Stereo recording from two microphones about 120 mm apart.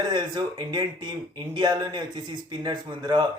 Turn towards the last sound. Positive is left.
turn(degrees=-40)  # may be behind; listen again after turning